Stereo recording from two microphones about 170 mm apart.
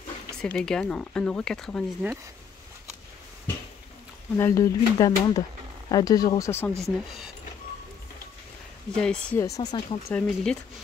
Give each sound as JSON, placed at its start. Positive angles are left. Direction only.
{"t": 0.4, "sound": "speech", "side_deg": 5}
{"t": 4.4, "sound": "speech", "side_deg": 15}
{"t": 8.9, "sound": "speech", "side_deg": 5}
{"t": 9.4, "sound": "speech", "side_deg": 20}
{"t": 10.1, "sound": "speech", "side_deg": 5}